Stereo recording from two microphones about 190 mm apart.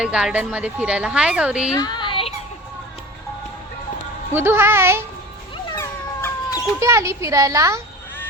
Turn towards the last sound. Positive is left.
turn(degrees=-15)  # may be behind; listen again after turning